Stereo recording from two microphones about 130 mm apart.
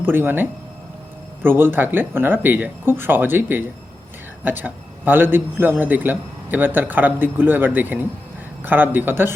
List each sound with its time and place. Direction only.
0.0 s a man's voice: 15° right (ahead or behind)